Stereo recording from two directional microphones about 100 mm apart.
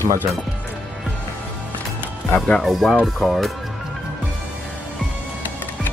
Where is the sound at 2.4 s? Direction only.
Centre (ahead or behind).